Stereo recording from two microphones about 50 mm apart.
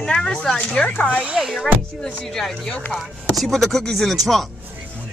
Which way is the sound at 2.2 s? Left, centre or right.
Centre.